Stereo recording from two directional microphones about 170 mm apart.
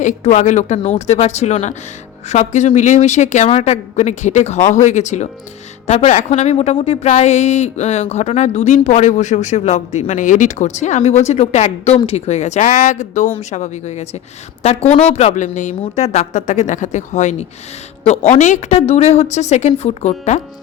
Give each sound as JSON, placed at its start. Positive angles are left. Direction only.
{"t": 0.0, "sound": "speech", "side_deg": 45}